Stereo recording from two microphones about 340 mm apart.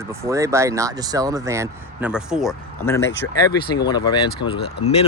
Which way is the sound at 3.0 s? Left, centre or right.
Left.